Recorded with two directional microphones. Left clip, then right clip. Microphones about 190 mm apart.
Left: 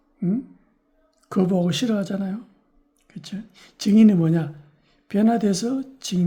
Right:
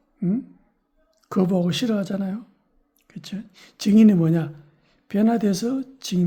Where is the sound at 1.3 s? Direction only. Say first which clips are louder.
Even; 10° right (ahead or behind).